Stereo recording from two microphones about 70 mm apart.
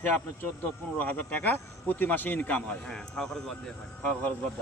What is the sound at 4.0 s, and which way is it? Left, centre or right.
Speech, centre.